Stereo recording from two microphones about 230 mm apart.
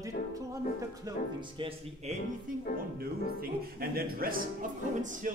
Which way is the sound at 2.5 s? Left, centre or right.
Right.